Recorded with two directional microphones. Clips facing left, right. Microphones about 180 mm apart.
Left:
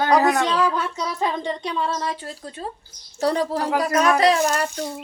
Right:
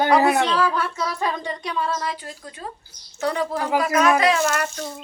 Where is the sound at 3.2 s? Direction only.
35° left (ahead or behind).